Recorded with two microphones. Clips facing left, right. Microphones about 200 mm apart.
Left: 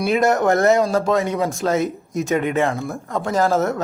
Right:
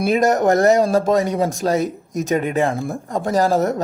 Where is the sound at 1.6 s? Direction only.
30° right (ahead or behind).